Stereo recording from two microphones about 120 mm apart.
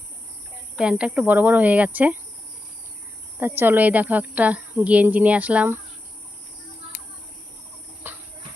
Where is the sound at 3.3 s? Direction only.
15° right (ahead or behind).